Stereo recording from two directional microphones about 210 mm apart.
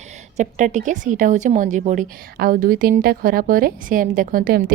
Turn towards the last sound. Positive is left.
turn(degrees=-45)  # may be behind; listen again after turning